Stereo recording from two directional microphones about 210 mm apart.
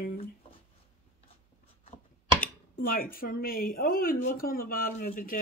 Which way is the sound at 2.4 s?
45° left (ahead or behind).